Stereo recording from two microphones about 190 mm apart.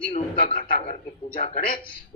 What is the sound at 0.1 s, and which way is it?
A man's voice, 40° left (ahead or behind).